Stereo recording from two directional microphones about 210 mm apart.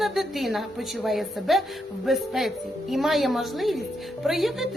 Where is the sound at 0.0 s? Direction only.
Centre (ahead or behind).